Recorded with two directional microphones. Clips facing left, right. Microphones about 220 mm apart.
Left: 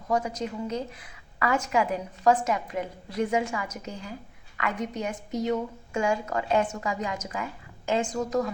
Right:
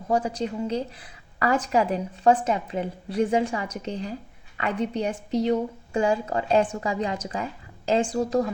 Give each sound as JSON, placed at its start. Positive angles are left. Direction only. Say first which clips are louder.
{"t": 0.1, "sound": "a woman's voice", "louder": "right 3 dB", "side_deg": -30}